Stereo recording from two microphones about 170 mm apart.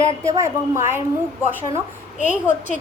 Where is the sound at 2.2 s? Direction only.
45° left (ahead or behind).